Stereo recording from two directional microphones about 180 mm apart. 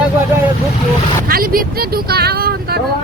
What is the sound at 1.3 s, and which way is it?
Speech, 55° right (ahead or behind).